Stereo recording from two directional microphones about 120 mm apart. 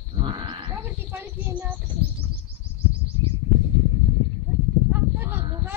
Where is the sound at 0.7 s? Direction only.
20° right (ahead or behind).